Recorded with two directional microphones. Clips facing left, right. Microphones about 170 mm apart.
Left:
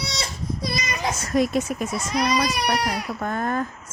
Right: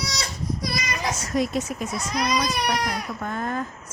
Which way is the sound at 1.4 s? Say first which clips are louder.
Left 4 dB; 60° left (ahead or behind).